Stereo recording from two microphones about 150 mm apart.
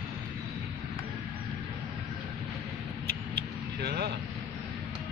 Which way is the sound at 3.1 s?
90° right.